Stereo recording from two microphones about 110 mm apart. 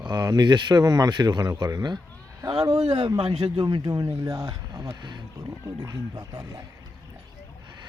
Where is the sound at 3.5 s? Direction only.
45° right (ahead or behind).